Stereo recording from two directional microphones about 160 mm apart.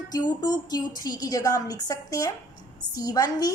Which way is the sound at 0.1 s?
25° left (ahead or behind).